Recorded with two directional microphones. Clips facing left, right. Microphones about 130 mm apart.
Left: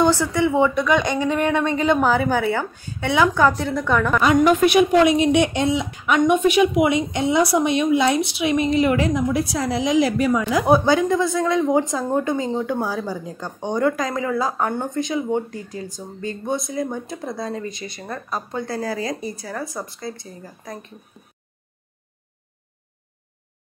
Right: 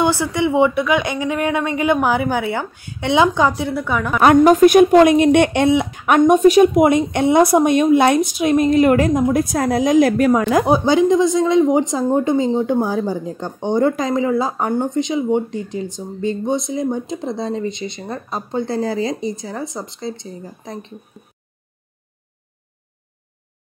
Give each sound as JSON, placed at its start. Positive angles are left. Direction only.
{"t": 0.0, "sound": "a woman's voice", "side_deg": -15}
{"t": 4.4, "sound": "a woman's voice", "side_deg": -40}
{"t": 6.2, "sound": "a woman's voice", "side_deg": -40}
{"t": 10.7, "sound": "speech", "side_deg": -20}